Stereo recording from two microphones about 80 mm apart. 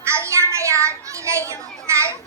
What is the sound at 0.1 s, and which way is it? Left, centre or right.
Children playing, right.